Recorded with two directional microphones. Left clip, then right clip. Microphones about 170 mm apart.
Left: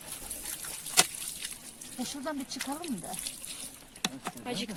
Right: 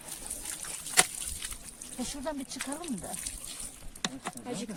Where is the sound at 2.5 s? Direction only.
10° right (ahead or behind).